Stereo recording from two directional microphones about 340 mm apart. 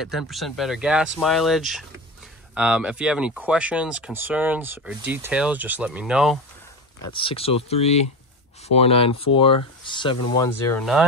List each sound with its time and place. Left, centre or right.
0.3 s speech: centre
7.0 s speech: centre